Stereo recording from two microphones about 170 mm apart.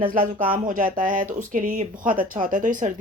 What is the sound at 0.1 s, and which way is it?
Speech, 55° right (ahead or behind).